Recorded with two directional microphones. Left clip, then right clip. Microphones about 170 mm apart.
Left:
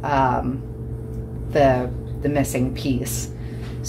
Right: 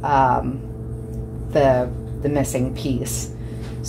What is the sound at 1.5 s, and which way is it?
A woman's voice, 15° right (ahead or behind).